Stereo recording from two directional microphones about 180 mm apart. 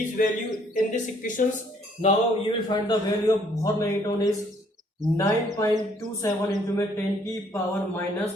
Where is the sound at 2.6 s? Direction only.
20° left (ahead or behind).